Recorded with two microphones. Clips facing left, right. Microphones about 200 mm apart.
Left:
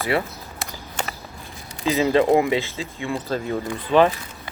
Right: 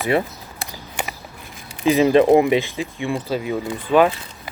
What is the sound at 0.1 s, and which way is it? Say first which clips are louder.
Speech: right 3 dB; 20° right (ahead or behind).